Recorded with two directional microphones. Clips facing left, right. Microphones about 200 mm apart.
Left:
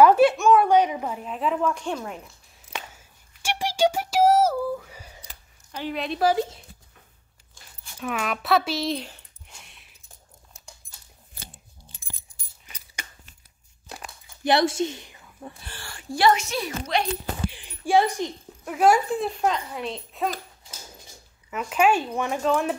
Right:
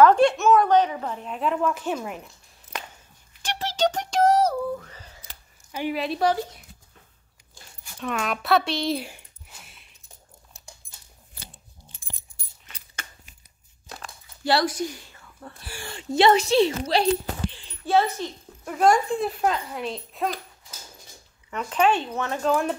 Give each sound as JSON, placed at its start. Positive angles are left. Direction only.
{"t": 0.0, "sound": "a woman's voice", "side_deg": 5}
{"t": 0.7, "sound": "a woman's voice", "side_deg": 10}
{"t": 3.4, "sound": "a sound", "side_deg": 10}
{"t": 5.7, "sound": "a woman's voice", "side_deg": -10}
{"t": 7.8, "sound": "a sound", "side_deg": 0}
{"t": 12.6, "sound": "keys jangling", "side_deg": 10}
{"t": 13.8, "sound": "a sound", "side_deg": 10}
{"t": 14.4, "sound": "a woman's voice", "side_deg": 20}
{"t": 15.6, "sound": "speech", "side_deg": -10}
{"t": 15.9, "sound": "a woman's voice", "side_deg": -25}
{"t": 17.5, "sound": "a sound", "side_deg": 10}
{"t": 18.6, "sound": "a woman's voice", "side_deg": 5}
{"t": 21.5, "sound": "speech", "side_deg": 10}
{"t": 22.4, "sound": "a woman's voice", "side_deg": 0}